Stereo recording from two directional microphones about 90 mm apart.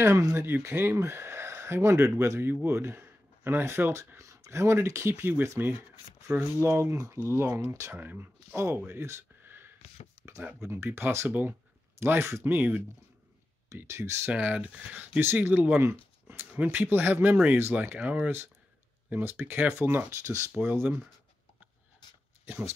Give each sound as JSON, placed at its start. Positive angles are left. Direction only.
{"t": 0.0, "sound": "speech", "side_deg": -30}
{"t": 5.1, "sound": "speech", "side_deg": -20}
{"t": 6.6, "sound": "speech", "side_deg": -30}
{"t": 12.5, "sound": "speech", "side_deg": -15}
{"t": 13.7, "sound": "speech", "side_deg": -30}
{"t": 14.3, "sound": "speech", "side_deg": -15}